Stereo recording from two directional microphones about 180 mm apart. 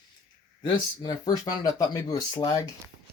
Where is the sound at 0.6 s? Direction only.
25° left (ahead or behind).